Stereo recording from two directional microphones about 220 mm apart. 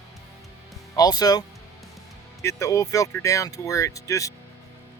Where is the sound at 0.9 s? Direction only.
15° left (ahead or behind).